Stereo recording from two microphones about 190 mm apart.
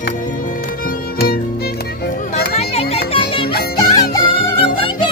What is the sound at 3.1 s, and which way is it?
Music, 30° left (ahead or behind).